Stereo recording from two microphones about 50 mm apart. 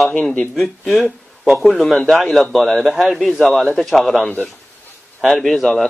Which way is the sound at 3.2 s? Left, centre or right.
Centre.